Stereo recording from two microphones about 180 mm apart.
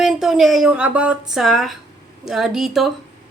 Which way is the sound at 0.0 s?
Centre (ahead or behind).